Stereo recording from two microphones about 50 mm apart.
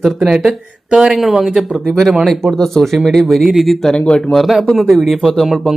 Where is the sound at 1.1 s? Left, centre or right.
Centre.